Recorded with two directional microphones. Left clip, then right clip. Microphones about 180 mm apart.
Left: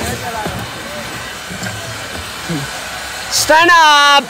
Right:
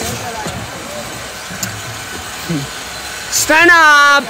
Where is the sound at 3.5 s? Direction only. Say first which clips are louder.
Right 1 dB; 20° left (ahead or behind).